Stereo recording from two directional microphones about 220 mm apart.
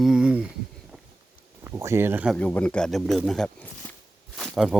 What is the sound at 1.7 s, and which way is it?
Speech, 10° right (ahead or behind).